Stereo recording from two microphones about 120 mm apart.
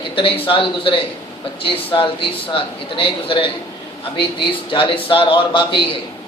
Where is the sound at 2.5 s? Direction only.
45° left (ahead or behind).